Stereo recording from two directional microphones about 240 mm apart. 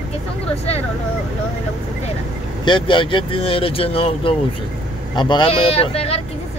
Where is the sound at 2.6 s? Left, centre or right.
Left.